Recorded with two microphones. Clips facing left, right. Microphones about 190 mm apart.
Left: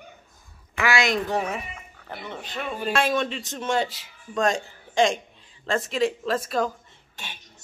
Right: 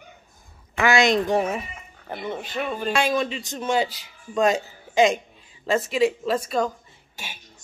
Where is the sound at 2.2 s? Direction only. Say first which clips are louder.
Right 5 dB; 10° right (ahead or behind).